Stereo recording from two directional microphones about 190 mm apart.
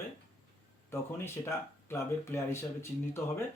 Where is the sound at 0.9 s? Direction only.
10° left (ahead or behind).